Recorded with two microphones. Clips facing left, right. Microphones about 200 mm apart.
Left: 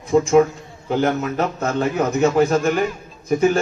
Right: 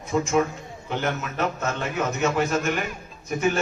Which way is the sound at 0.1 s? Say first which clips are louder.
Left 8 dB; 35° left (ahead or behind).